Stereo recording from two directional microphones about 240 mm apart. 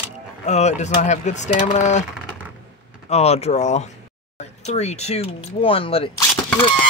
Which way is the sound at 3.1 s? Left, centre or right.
Left.